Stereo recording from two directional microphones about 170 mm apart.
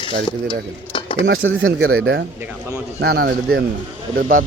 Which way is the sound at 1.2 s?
90° right.